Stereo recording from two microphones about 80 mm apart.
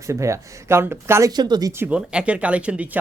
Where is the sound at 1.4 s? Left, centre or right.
Right.